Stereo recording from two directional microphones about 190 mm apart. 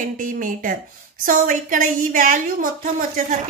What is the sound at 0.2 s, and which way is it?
A woman's voice, 45° right (ahead or behind).